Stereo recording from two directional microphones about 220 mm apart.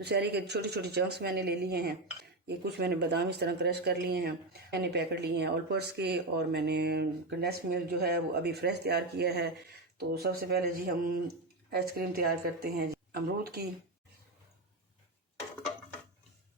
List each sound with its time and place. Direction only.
0.0 s speech: 50° right (ahead or behind)